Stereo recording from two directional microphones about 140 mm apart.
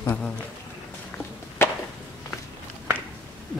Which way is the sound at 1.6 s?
20° left (ahead or behind).